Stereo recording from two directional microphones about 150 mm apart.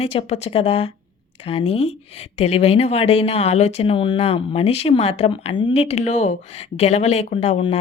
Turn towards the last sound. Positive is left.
turn(degrees=40)  # may be behind; listen again after turning